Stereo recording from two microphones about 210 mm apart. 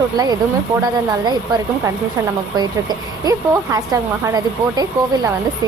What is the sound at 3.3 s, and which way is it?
Speech, 15° right (ahead or behind).